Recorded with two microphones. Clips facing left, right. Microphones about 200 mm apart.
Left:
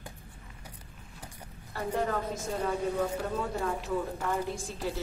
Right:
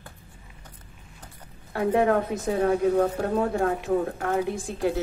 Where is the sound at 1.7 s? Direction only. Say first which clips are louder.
Right 9 dB; 65° right (ahead or behind).